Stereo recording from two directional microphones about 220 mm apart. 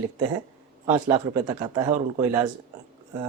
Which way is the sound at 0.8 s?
20° right (ahead or behind).